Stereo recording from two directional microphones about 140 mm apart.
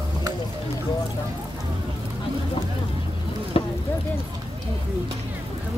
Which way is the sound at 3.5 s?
45° left (ahead or behind).